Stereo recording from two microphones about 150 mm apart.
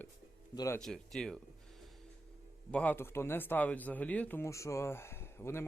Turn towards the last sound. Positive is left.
turn(degrees=15)  # may be behind; listen again after turning